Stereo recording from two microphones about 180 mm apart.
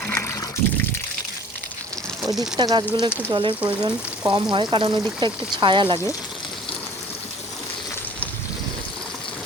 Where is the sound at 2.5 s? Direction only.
25° right (ahead or behind).